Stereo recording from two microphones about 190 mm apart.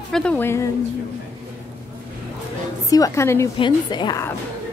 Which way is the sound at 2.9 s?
15° left (ahead or behind).